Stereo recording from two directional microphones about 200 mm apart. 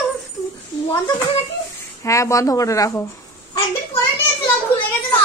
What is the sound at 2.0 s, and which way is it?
Speech, 15° left (ahead or behind).